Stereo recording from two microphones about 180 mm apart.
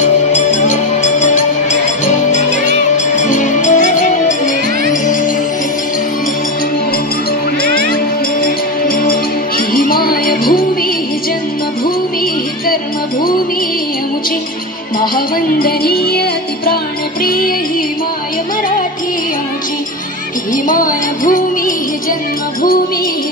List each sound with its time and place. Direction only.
0.0 s music: 40° left (ahead or behind)
7.6 s music: 55° left (ahead or behind)
15.0 s music: 55° left (ahead or behind)
20.6 s music: 50° left (ahead or behind)